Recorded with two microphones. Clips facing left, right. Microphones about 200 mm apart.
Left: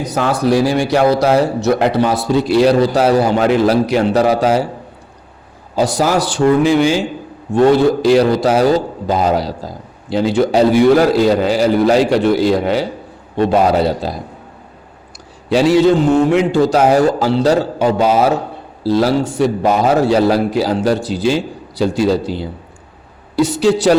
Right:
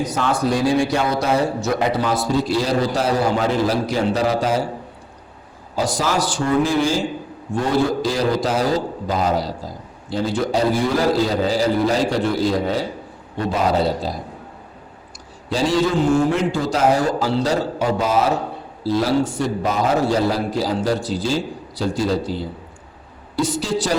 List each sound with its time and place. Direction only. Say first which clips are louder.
0.0 s a man's voice: left 4 dB; 65° left (ahead or behind)
5.7 s a man's voice: left 6 dB; 65° left (ahead or behind)
15.4 s a man's voice: left 8 dB; 65° left (ahead or behind)